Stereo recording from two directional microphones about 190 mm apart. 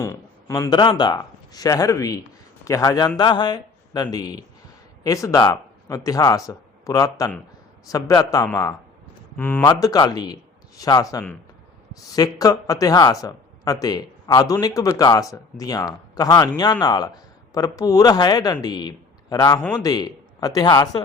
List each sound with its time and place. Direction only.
0.0 s a man's voice: 15° left (ahead or behind)